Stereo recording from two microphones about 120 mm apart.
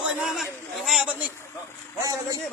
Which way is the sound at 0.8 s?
Centre (ahead or behind).